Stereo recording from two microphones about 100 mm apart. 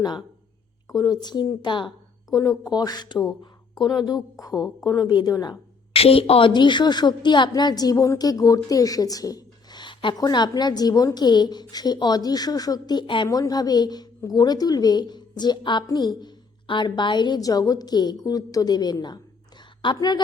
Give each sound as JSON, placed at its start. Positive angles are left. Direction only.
{"t": 0.0, "sound": "a woman's voice", "side_deg": 45}
{"t": 2.3, "sound": "a woman's voice", "side_deg": 40}
{"t": 5.9, "sound": "a woman's voice", "side_deg": 75}
{"t": 6.5, "sound": "a woman's voice", "side_deg": 50}
{"t": 10.2, "sound": "a woman's voice", "side_deg": 40}
{"t": 13.2, "sound": "a woman's voice", "side_deg": 35}